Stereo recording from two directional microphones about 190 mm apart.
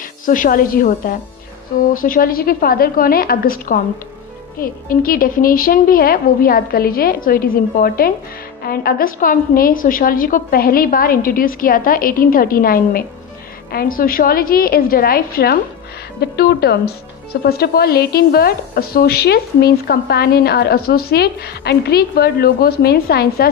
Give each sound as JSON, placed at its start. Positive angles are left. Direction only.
{"t": 0.2, "sound": "a woman's voice", "side_deg": 45}